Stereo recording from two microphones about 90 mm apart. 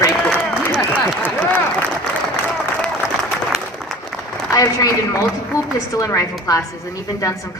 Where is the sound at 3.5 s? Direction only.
Centre (ahead or behind).